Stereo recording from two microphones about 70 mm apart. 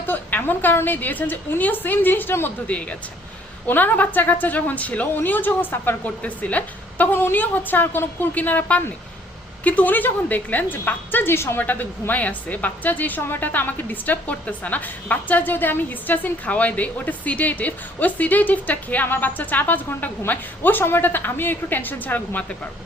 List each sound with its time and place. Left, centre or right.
0.0 s a woman's voice: left
2.6 s a woman's voice: centre
6.2 s a woman's voice: left
11.6 s a woman's voice: left